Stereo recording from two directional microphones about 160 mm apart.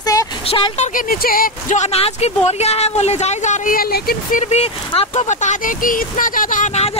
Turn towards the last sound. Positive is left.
turn(degrees=50)  # may be behind; listen again after turning